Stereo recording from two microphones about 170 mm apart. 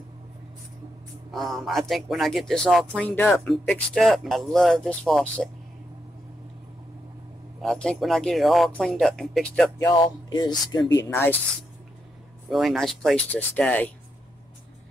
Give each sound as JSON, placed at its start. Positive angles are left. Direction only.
{"t": 1.3, "sound": "speech", "side_deg": 0}
{"t": 7.6, "sound": "speech", "side_deg": 5}
{"t": 9.8, "sound": "speech", "side_deg": 25}
{"t": 11.1, "sound": "speech", "side_deg": 15}
{"t": 12.4, "sound": "speech", "side_deg": 0}